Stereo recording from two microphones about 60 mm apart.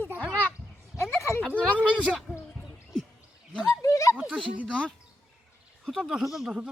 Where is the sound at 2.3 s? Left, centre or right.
Right.